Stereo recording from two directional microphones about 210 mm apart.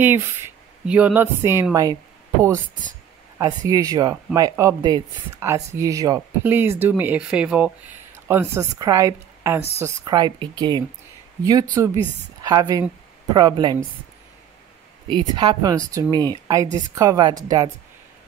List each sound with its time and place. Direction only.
0.8 s speech: 5° right (ahead or behind)
3.3 s speech: 15° right (ahead or behind)
15.0 s speech: 20° right (ahead or behind)